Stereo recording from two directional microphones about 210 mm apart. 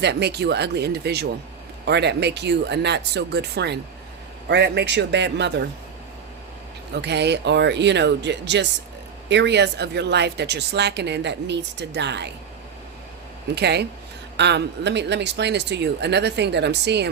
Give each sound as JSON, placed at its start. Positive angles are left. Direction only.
{"t": 0.0, "sound": "a woman's voice", "side_deg": -55}
{"t": 6.9, "sound": "a woman's voice", "side_deg": -55}
{"t": 13.6, "sound": "a woman's voice", "side_deg": -50}